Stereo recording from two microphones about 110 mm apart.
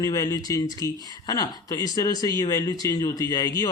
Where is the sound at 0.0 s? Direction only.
30° left (ahead or behind).